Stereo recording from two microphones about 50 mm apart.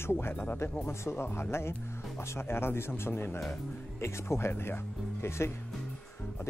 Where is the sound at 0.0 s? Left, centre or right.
Left.